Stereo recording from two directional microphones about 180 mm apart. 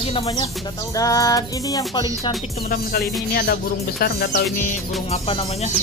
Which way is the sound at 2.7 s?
55° left (ahead or behind).